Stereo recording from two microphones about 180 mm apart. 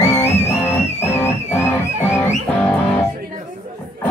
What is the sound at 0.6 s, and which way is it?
Music, 15° left (ahead or behind).